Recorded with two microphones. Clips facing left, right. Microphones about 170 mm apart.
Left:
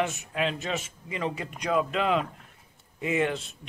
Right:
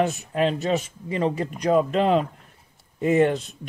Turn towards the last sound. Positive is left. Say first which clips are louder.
# right 8 dB
turn(degrees=-40)  # may be behind; listen again after turning